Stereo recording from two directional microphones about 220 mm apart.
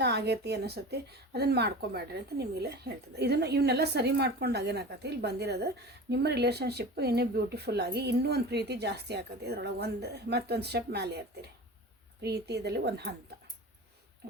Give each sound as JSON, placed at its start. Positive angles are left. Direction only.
{"t": 0.0, "sound": "speech", "side_deg": -50}
{"t": 12.2, "sound": "speech", "side_deg": -50}